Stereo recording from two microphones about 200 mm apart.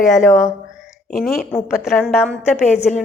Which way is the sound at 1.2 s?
Centre (ahead or behind).